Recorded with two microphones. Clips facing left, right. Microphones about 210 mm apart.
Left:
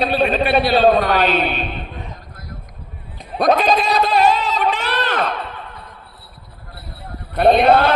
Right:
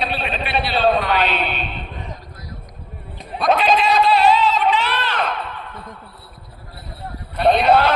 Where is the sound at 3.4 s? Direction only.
40° left (ahead or behind).